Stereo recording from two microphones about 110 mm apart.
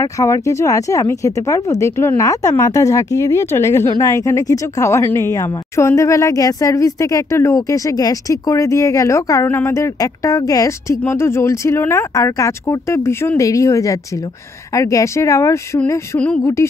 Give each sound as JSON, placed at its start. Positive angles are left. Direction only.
{"t": 0.0, "sound": "speech", "side_deg": 30}